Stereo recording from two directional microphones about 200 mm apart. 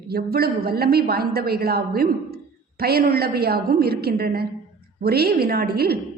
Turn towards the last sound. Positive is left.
turn(degrees=-50)  # may be behind; listen again after turning